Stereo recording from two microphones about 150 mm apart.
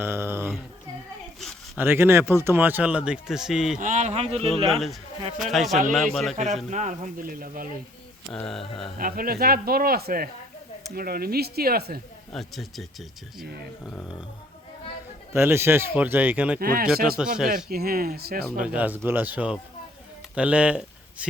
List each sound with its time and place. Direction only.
0.0 s a sound: 15° right (ahead or behind)
1.4 s a sound: centre (ahead or behind)
1.8 s speech: 15° right (ahead or behind)
3.8 s speech: 55° right (ahead or behind)
4.7 s speech: centre (ahead or behind)
6.7 s speech: 55° right (ahead or behind); by 7.7 s 70° right (ahead or behind)
8.3 s speech: 5° left (ahead or behind)
9.0 s speech: 70° right (ahead or behind); by 11.9 s 90° right
12.3 s speech: centre (ahead or behind)
15.3 s speech: 15° right (ahead or behind)
16.6 s speech: 80° right
17.2 s speech: 5° right (ahead or behind)
17.7 s speech: 90° right
18.6 s speech: 10° right (ahead or behind)